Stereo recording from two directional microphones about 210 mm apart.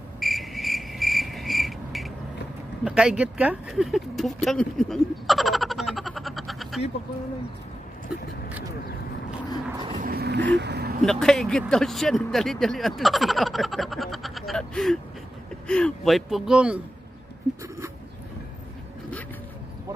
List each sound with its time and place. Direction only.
0.2 s cricket: centre (ahead or behind)
2.8 s a sound: 5° right (ahead or behind)
9.9 s vehicle: 45° right (ahead or behind)
11.0 s speech: centre (ahead or behind)